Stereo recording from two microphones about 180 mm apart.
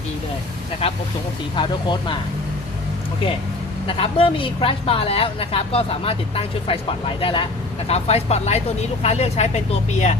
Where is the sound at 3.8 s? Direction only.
30° left (ahead or behind).